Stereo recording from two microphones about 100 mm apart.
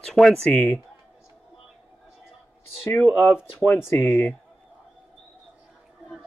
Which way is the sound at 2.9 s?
10° left (ahead or behind).